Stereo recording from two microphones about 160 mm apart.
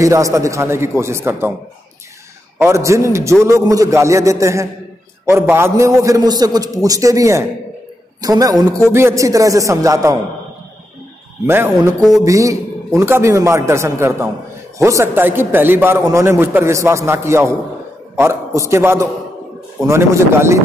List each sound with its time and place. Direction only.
0.0 s a man's voice: 20° right (ahead or behind)
2.6 s a man's voice: 20° right (ahead or behind)
11.4 s a man's voice: 15° right (ahead or behind)